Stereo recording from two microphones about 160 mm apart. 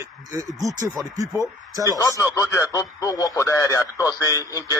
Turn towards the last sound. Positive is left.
turn(degrees=20)  # may be behind; listen again after turning